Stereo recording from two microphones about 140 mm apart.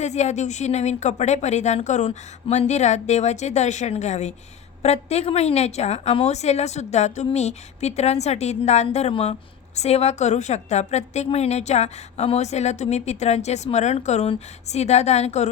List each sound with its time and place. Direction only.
0.0 s a woman's voice: 55° left (ahead or behind)